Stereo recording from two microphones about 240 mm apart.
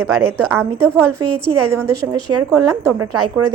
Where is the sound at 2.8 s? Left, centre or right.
Right.